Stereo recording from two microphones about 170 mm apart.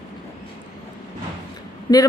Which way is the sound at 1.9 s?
20° left (ahead or behind).